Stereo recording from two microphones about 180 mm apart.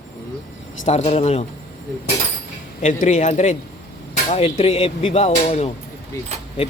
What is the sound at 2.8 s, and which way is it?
Speech, 40° left (ahead or behind).